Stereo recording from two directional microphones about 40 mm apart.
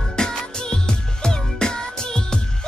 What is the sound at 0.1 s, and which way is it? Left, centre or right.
Music, centre.